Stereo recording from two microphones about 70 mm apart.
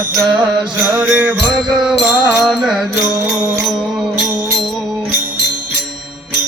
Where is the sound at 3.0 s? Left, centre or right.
Centre.